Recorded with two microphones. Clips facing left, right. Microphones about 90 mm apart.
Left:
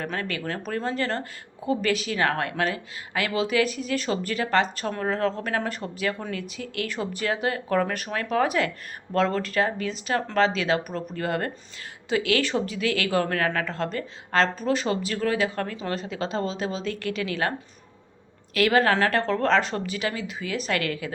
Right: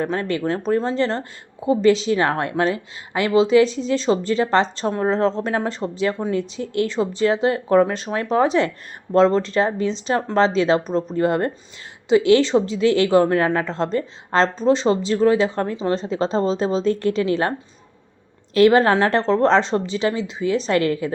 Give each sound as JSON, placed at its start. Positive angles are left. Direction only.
{"t": 0.0, "sound": "speech", "side_deg": -25}
{"t": 18.5, "sound": "speech", "side_deg": -30}